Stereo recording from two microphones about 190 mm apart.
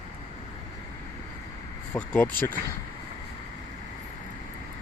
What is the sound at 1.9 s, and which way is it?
Speech, centre (ahead or behind).